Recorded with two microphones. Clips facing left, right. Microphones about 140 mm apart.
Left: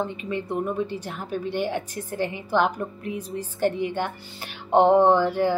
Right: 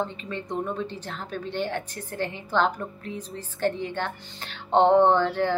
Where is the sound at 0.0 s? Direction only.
10° left (ahead or behind).